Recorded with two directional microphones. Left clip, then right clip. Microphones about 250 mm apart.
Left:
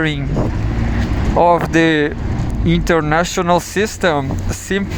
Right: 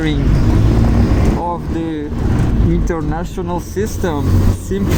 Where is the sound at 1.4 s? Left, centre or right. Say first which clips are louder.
Left 9 dB; left.